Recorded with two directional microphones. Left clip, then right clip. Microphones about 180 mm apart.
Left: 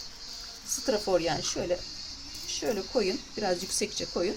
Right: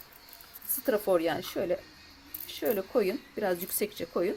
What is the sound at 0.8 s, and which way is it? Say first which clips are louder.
Speech: right 1 dB; 35° right (ahead or behind).